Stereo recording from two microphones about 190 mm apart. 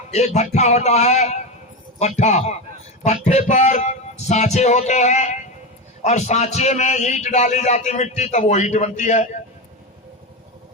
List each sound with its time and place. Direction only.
0.1 s a man's voice: 35° left (ahead or behind)